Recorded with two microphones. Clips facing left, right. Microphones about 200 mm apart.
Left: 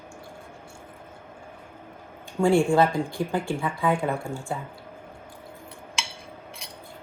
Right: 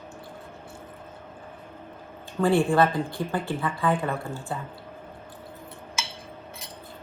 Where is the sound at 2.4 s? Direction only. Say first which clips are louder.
Left 2 dB; 10° left (ahead or behind).